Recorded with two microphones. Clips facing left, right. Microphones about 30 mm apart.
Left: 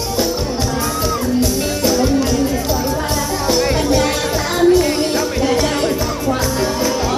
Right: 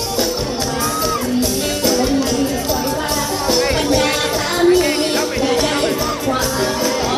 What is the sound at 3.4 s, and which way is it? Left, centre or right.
Music, centre.